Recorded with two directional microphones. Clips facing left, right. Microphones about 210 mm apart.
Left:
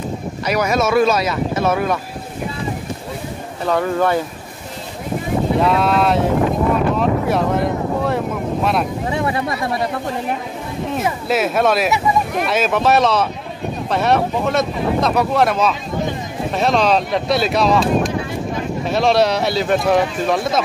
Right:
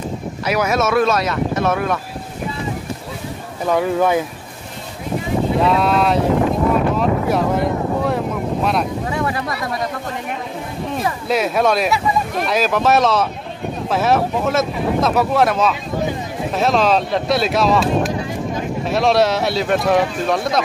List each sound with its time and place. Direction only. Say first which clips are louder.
0.5 s speech: even; 5° right (ahead or behind)
3.6 s speech: right 1 dB; 10° right (ahead or behind)
5.6 s speech: even; centre (ahead or behind)
7.0 s boat: even; centre (ahead or behind)
9.1 s speech: left 2 dB; 25° left (ahead or behind)
11.2 s speech: even; centre (ahead or behind)